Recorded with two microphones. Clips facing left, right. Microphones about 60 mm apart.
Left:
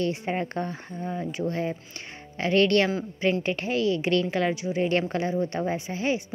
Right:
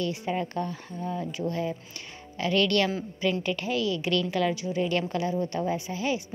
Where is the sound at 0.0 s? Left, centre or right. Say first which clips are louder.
Left 2 dB; left.